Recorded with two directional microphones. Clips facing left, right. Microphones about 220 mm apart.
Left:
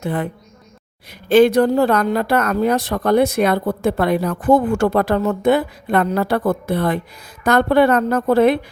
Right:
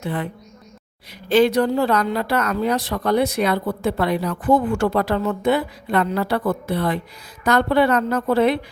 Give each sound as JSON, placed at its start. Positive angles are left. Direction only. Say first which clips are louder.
{"t": 0.0, "sound": "speech", "louder": "left 4 dB", "side_deg": 45}
{"t": 1.3, "sound": "speech", "louder": "left 4 dB", "side_deg": 50}